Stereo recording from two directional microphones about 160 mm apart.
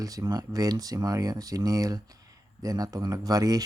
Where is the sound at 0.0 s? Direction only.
20° right (ahead or behind).